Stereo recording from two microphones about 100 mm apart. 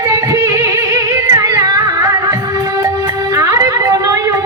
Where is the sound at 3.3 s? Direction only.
35° right (ahead or behind).